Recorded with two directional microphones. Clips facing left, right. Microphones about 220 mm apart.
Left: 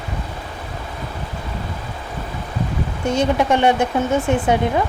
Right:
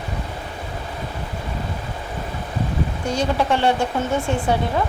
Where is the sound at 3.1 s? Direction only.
20° left (ahead or behind).